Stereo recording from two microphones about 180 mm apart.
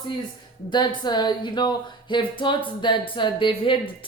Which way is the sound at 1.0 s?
25° left (ahead or behind).